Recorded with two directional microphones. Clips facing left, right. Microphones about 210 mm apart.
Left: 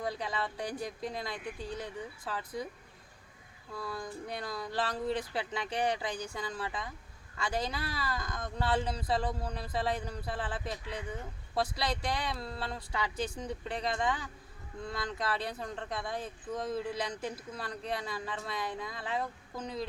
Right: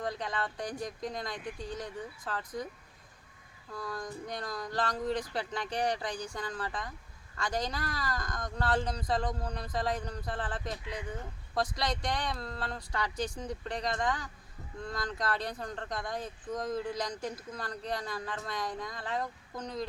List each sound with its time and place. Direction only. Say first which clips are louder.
0.0 s speech: even; 5° left (ahead or behind)
3.7 s speech: even; 5° left (ahead or behind)